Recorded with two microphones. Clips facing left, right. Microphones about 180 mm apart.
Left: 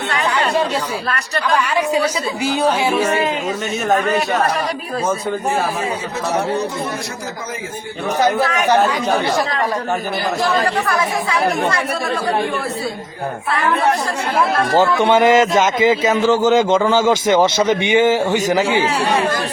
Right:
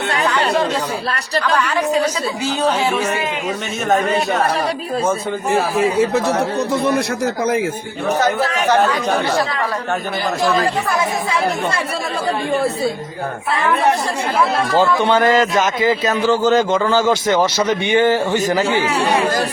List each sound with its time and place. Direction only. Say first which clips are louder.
0.3 s chatter: even; 10° left (ahead or behind)
1.5 s speech: left 1 dB; 10° left (ahead or behind)
3.8 s a man's voice: right 1 dB; centre (ahead or behind)
5.7 s a man's voice: right 8 dB; centre (ahead or behind)
10.8 s speech: even; 20° right (ahead or behind)
15.0 s a man's voice: left 2 dB; 20° left (ahead or behind)
17.9 s speech: even; 15° left (ahead or behind)